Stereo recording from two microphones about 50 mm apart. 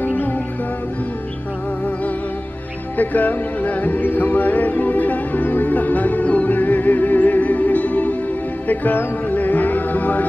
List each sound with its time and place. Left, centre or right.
0.0 s music: left
3.0 s music: left